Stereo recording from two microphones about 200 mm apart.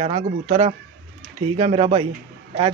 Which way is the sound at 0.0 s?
35° right (ahead or behind).